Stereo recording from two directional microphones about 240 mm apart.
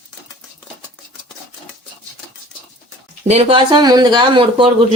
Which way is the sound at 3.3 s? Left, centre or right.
Right.